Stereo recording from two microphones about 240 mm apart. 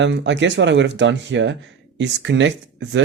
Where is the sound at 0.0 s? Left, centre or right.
Right.